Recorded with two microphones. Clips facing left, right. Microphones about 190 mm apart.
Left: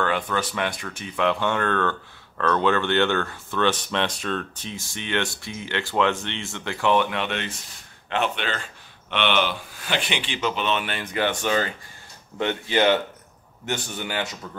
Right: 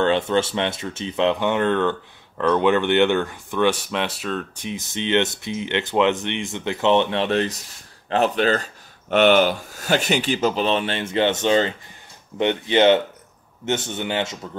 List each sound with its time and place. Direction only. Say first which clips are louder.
0.0 s speech: right 6 dB; 25° right (ahead or behind); by 4.6 s 5° right (ahead or behind)
4.6 s speech: right 7 dB; 20° right (ahead or behind)